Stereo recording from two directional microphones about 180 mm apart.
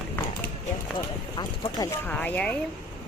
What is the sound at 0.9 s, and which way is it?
Speech, 25° left (ahead or behind).